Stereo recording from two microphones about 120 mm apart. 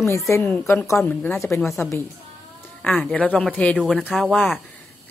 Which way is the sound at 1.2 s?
20° left (ahead or behind).